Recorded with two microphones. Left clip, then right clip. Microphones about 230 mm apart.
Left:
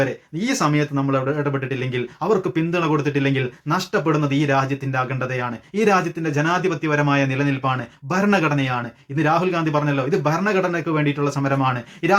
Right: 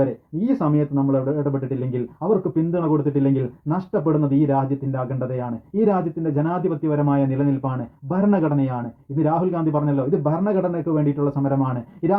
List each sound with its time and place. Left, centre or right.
0.4 s speech: left